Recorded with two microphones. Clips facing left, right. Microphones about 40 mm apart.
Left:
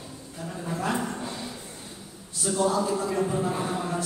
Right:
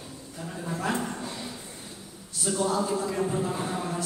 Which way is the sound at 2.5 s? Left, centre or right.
Left.